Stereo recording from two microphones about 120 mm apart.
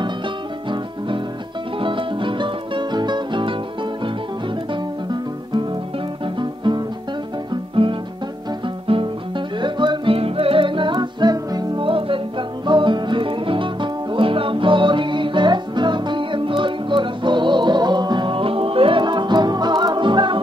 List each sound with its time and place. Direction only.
0.7 s music: 45° right (ahead or behind)
6.2 s music: 40° right (ahead or behind)
7.7 s guitar: 45° right (ahead or behind)
8.6 s music: 45° right (ahead or behind)
11.8 s music: 45° right (ahead or behind)